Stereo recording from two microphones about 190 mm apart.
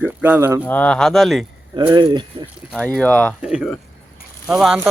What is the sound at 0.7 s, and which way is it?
Speech, 5° left (ahead or behind).